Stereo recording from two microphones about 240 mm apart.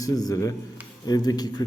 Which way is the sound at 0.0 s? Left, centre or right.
Centre.